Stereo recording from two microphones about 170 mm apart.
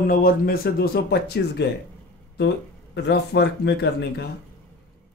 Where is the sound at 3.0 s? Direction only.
80° left.